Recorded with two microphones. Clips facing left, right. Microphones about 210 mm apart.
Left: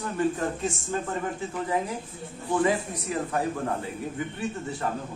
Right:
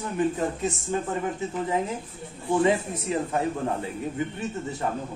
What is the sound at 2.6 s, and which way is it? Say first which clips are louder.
Speech: right 2 dB; 25° right (ahead or behind).